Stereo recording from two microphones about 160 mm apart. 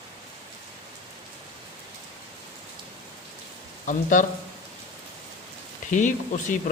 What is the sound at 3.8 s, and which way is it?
Speech, 55° left (ahead or behind).